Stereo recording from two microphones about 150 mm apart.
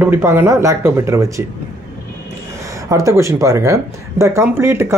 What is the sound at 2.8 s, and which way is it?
Speech, 20° right (ahead or behind).